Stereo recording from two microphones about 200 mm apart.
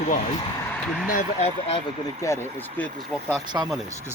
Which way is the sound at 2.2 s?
15° left (ahead or behind).